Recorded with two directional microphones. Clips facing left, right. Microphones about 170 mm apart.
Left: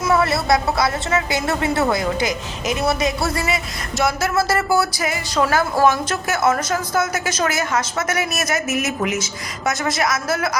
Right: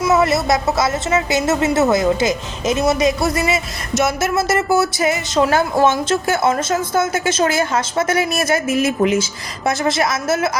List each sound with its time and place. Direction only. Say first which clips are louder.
0.1 s a woman's voice: right 1 dB; 20° right (ahead or behind)